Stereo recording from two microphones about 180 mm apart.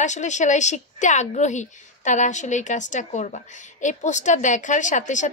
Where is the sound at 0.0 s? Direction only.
40° left (ahead or behind).